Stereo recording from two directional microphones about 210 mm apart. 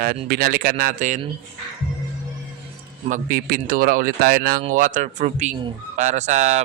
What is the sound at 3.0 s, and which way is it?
A man's voice, 40° right (ahead or behind).